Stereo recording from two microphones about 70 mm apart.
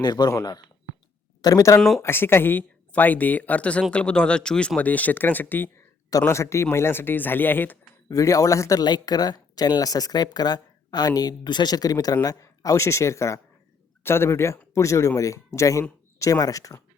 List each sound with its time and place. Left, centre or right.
0.0 s speech: left
1.4 s speech: left
2.0 s speech: left; by 4.7 s centre
4.8 s speech: left
6.2 s speech: left
8.1 s speech: left
8.8 s speech: left